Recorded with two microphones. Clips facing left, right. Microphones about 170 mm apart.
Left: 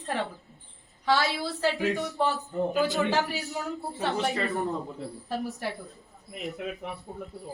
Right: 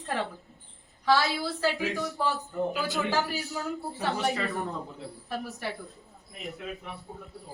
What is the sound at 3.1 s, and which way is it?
Speech, 20° left (ahead or behind).